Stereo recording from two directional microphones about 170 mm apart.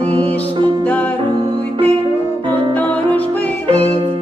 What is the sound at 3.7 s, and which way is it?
Music, 40° right (ahead or behind).